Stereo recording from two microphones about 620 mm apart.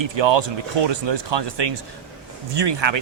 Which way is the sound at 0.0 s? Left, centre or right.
Right.